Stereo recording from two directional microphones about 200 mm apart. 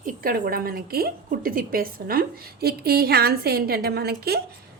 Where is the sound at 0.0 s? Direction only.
45° right (ahead or behind).